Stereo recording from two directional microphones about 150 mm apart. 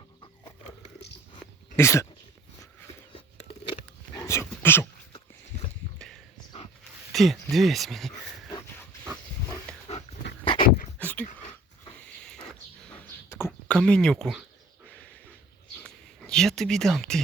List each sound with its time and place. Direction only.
1.7 s speech: 20° left (ahead or behind)
4.1 s dog: 20° left (ahead or behind)
7.1 s a sound: centre (ahead or behind)
7.5 s speech: centre (ahead or behind)
9.9 s dog: 40° left (ahead or behind)
10.6 s dog: 65° left (ahead or behind)
11.0 s dog: 10° left (ahead or behind)
13.3 s a sound: 15° left (ahead or behind)
13.7 s speech: 5° left (ahead or behind)
15.8 s a sound: 5° left (ahead or behind)